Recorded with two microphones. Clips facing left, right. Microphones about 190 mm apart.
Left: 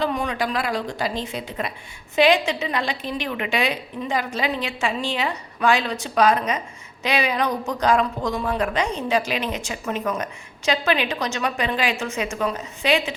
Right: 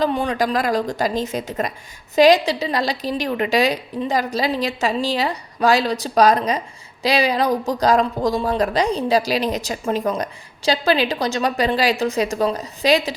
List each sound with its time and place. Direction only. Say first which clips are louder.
0.0 s speech: right 4 dB; 35° right (ahead or behind)